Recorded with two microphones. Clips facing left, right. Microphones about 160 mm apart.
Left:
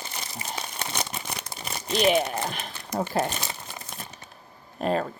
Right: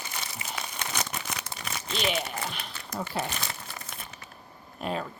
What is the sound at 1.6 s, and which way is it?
Crumpling, 30° left (ahead or behind).